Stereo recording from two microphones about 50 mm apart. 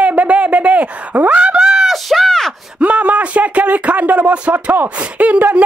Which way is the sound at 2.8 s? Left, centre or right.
Right.